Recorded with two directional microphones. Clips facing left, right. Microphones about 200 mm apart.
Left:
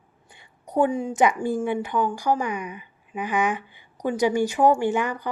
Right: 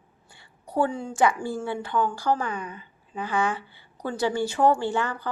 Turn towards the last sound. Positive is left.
turn(degrees=15)  # may be behind; listen again after turning